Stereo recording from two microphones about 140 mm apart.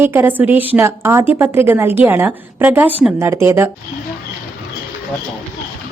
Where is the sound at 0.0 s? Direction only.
15° right (ahead or behind).